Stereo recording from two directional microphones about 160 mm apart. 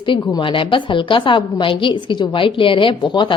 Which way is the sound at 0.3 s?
30° left (ahead or behind).